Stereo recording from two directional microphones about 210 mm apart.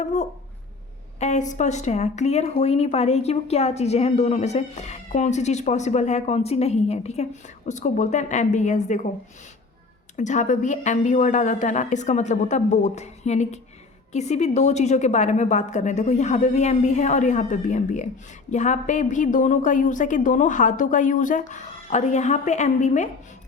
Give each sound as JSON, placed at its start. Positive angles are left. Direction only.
{"t": 0.0, "sound": "speech", "side_deg": 35}
{"t": 10.2, "sound": "speech", "side_deg": 35}